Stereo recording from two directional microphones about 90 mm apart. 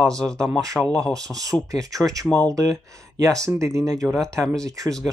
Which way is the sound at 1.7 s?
40° right (ahead or behind).